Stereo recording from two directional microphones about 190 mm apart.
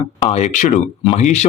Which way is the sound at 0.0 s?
30° left (ahead or behind).